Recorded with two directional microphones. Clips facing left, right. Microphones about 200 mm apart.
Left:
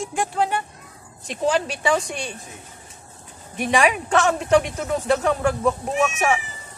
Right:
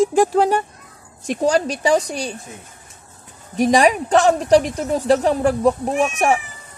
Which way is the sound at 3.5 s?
35° right (ahead or behind).